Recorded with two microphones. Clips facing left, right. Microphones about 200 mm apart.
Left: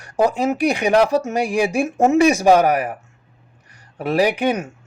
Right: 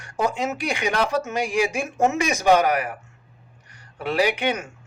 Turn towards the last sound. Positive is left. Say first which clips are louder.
# left 4 dB
turn(degrees=35)  # may be behind; listen again after turning